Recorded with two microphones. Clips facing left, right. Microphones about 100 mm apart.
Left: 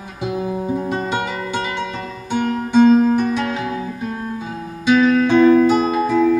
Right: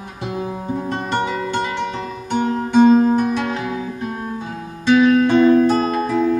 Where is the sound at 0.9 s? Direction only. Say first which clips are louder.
Even; 5° left (ahead or behind).